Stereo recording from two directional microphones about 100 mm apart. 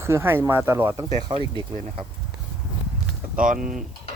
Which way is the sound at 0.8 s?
50° right (ahead or behind).